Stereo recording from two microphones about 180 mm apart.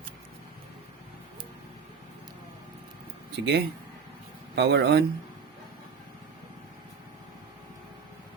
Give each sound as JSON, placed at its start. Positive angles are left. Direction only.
{"t": 3.3, "sound": "speech", "side_deg": -75}